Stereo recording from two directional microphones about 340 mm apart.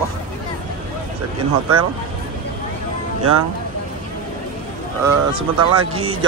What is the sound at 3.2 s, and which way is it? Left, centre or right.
Speech, right.